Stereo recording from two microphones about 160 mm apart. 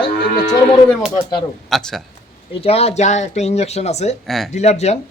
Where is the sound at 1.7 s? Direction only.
Centre (ahead or behind).